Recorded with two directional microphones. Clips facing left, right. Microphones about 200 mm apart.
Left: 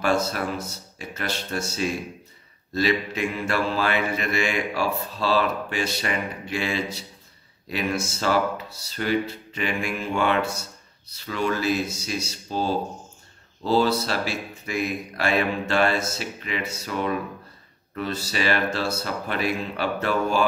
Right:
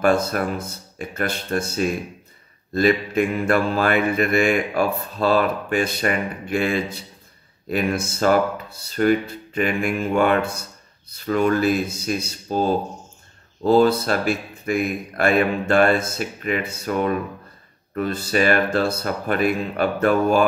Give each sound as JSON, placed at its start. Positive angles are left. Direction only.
{"t": 0.0, "sound": "mantra", "side_deg": -55}